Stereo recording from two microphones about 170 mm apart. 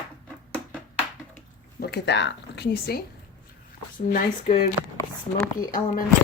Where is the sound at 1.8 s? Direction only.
75° left (ahead or behind).